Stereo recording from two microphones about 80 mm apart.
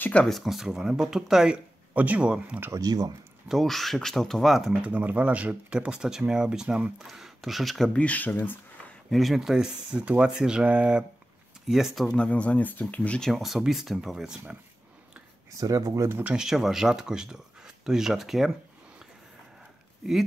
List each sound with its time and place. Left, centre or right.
0.0 s speech: centre
0.3 s speech: centre
2.0 s speech: centre
2.7 s speech: right
3.4 s speech: centre
4.8 s speech: centre
7.9 s speech: centre
9.1 s speech: centre
12.1 s speech: centre
13.2 s speech: centre
15.5 s speech: right
16.1 s speech: right
16.3 s speech: centre